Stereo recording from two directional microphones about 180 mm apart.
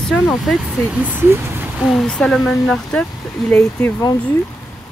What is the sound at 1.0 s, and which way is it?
Speech, 10° right (ahead or behind).